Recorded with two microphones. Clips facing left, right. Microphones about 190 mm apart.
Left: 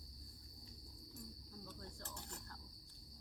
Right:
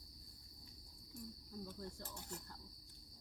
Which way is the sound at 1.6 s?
10° right (ahead or behind).